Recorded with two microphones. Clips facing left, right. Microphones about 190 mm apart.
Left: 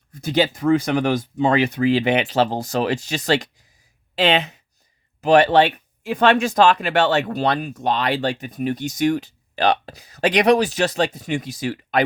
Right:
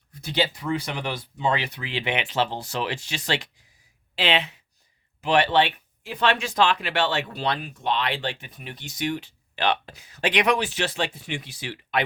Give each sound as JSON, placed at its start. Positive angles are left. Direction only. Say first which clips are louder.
{"t": 0.1, "sound": "speech", "louder": "left 6 dB", "side_deg": 45}